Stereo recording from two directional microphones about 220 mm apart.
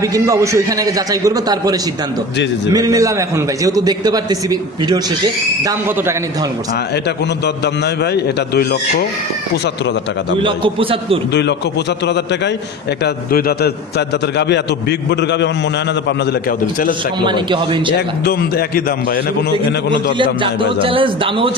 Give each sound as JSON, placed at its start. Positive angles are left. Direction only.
{"t": 0.0, "sound": "a man's voice", "side_deg": -15}
{"t": 7.4, "sound": "a man's voice", "side_deg": 50}
{"t": 10.4, "sound": "a man's voice", "side_deg": -25}
{"t": 12.0, "sound": "a man's voice", "side_deg": 50}
{"t": 17.2, "sound": "a man's voice", "side_deg": -20}
{"t": 18.3, "sound": "a man's voice", "side_deg": 45}
{"t": 20.1, "sound": "a man's voice", "side_deg": -20}